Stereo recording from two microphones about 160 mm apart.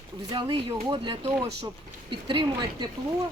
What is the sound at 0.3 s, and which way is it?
Speech, 30° right (ahead or behind).